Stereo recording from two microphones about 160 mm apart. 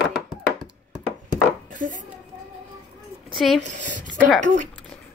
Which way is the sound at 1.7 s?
55° right (ahead or behind).